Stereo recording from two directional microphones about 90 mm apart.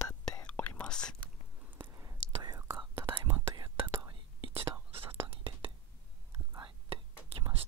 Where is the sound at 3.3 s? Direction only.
60° right (ahead or behind).